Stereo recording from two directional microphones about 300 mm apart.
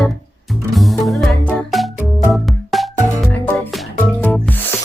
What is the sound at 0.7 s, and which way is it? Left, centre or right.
Music, centre.